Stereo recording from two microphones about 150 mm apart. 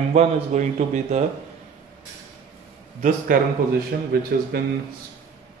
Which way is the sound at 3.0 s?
70° right (ahead or behind).